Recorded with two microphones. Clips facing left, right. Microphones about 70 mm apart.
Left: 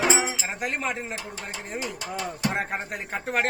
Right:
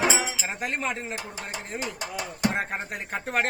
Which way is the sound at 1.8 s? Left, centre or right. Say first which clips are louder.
Left 2 dB; right.